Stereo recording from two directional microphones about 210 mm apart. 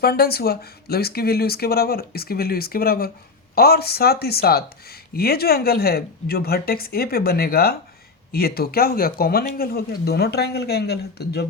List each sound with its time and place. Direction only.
0.0 s speech: 50° left (ahead or behind)